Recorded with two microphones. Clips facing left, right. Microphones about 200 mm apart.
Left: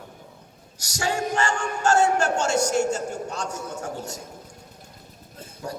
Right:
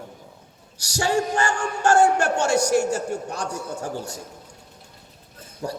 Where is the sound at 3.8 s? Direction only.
30° right (ahead or behind).